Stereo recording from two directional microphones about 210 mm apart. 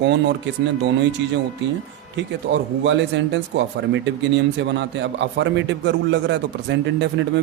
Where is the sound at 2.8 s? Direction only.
60° right (ahead or behind).